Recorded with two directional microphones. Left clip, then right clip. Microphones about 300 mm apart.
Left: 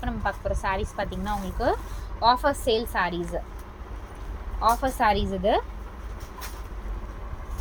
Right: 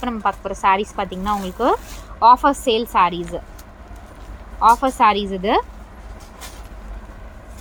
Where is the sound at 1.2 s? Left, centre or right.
Right.